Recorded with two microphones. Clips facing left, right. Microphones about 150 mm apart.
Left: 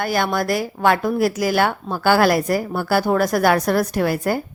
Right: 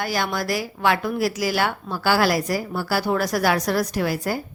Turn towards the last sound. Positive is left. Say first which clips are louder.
# left 4 dB
turn(degrees=55)  # may be behind; listen again after turning